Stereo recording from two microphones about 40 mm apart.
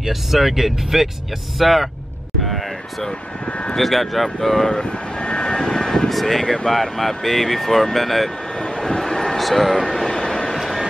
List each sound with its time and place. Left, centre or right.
0.0 s speech: centre
3.1 s speech: left
3.7 s speech: centre
6.0 s speech: centre
6.4 s speech: centre
6.7 s speech: centre
8.5 s vehicle: centre
10.5 s vehicle: centre